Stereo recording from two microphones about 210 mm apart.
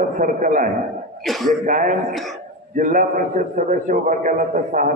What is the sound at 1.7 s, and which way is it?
A man's voice, 40° right (ahead or behind).